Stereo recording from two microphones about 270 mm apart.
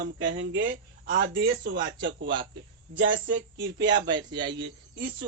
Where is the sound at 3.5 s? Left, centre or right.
Centre.